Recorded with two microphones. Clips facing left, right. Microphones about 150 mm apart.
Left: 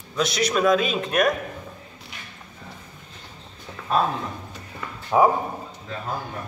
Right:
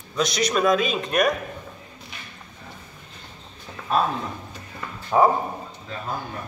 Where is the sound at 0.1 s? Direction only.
5° left (ahead or behind).